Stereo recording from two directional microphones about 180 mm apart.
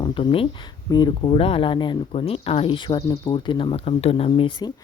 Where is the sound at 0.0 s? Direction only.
30° left (ahead or behind).